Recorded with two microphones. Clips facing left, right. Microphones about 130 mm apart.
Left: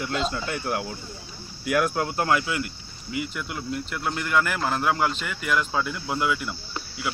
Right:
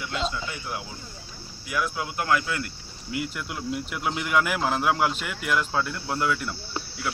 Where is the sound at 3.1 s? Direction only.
Centre (ahead or behind).